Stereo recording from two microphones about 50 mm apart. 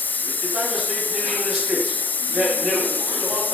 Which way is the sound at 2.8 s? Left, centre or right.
Left.